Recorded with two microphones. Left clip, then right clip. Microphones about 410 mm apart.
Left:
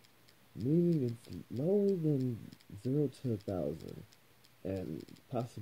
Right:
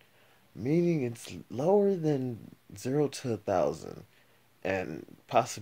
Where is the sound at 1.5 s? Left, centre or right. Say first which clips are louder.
Right 6 dB; right.